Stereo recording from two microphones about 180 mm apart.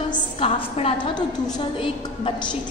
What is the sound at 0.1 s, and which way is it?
A woman's voice, 30° left (ahead or behind).